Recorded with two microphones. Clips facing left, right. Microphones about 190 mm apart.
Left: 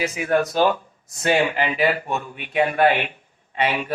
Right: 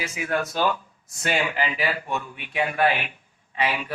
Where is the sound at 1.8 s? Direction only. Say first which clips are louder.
Left 5 dB; 40° left (ahead or behind); by 3.8 s 25° left (ahead or behind).